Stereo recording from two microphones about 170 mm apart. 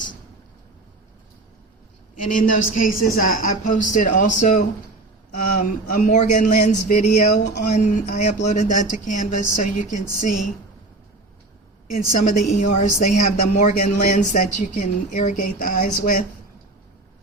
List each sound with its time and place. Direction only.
2.3 s a woman's voice: 50° left (ahead or behind)
11.9 s a woman's voice: 45° left (ahead or behind)